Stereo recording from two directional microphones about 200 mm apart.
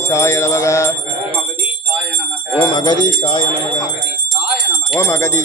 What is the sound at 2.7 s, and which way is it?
Speech, 20° left (ahead or behind).